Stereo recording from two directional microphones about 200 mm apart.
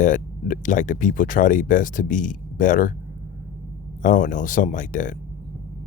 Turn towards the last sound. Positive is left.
turn(degrees=40)  # may be behind; listen again after turning